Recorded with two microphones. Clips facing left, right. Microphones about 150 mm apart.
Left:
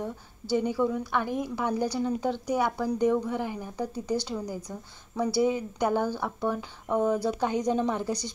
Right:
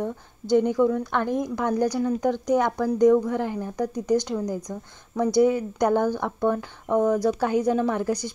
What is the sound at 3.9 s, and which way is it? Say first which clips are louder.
Speech: right 8 dB; 15° right (ahead or behind).